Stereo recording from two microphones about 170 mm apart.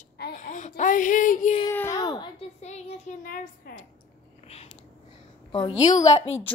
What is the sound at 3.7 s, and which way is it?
Speech, 60° left (ahead or behind).